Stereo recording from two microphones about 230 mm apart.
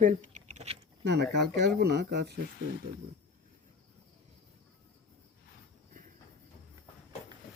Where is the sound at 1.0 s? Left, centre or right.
Right.